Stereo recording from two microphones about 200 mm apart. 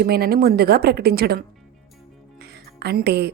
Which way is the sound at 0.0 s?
50° right (ahead or behind).